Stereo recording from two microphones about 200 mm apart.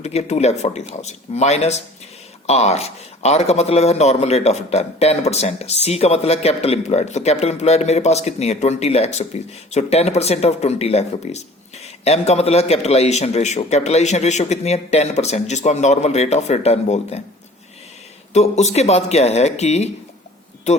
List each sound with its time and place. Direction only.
0.0 s a man's voice: 30° left (ahead or behind)
18.3 s a man's voice: 35° left (ahead or behind)